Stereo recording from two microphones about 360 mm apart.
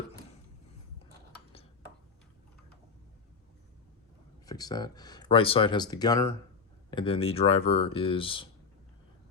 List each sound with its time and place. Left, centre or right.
4.4 s speech: centre